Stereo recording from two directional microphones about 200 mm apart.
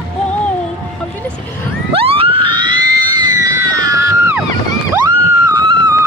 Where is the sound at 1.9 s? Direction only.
30° right (ahead or behind); by 4.4 s 10° right (ahead or behind).